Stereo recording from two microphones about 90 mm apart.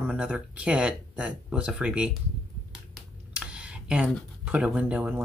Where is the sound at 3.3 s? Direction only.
10° right (ahead or behind).